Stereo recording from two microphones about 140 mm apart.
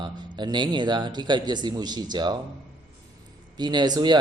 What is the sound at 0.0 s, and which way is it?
A man's voice, 30° right (ahead or behind).